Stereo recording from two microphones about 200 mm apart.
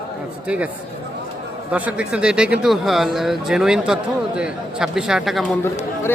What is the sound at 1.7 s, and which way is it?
Speech, 5° right (ahead or behind).